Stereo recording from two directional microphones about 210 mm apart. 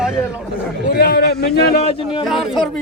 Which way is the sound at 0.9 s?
50° left (ahead or behind).